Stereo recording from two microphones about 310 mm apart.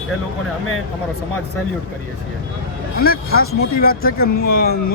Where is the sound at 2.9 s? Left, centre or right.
Left.